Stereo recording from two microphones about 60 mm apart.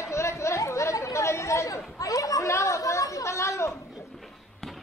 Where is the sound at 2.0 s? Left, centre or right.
Left.